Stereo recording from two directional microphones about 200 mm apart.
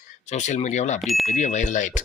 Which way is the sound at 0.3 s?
35° left (ahead or behind).